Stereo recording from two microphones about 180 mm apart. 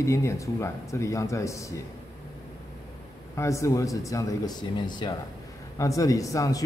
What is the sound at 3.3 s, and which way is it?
A man's voice, 15° left (ahead or behind).